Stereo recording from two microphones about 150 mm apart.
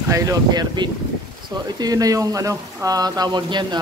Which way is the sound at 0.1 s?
20° right (ahead or behind).